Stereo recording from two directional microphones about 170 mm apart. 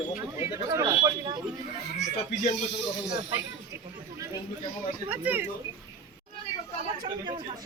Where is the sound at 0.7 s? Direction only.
25° right (ahead or behind).